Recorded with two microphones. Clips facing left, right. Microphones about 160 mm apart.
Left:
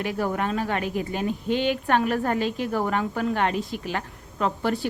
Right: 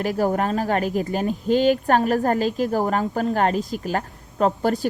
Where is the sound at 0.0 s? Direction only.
40° right (ahead or behind).